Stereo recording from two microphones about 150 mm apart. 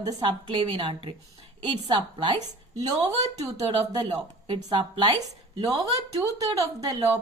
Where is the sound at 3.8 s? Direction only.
40° right (ahead or behind); by 6.7 s 25° right (ahead or behind).